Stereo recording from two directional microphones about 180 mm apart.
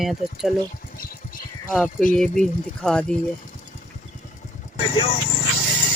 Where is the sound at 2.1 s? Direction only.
5° left (ahead or behind).